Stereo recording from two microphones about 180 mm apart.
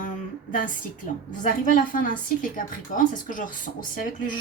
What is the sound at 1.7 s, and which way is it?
A woman's voice, 45° left (ahead or behind).